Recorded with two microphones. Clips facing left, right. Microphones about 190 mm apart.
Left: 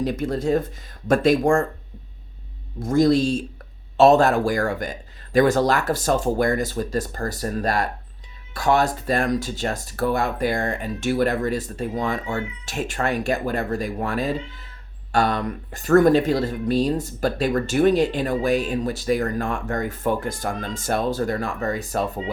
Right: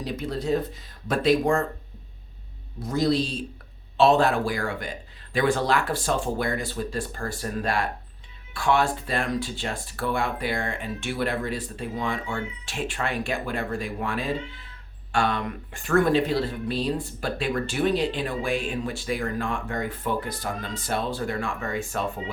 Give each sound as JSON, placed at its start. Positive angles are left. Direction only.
{"t": 0.0, "sound": "speech", "side_deg": 50}
{"t": 2.8, "sound": "speech", "side_deg": 45}